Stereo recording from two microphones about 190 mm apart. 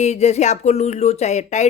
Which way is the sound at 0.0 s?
35° left (ahead or behind).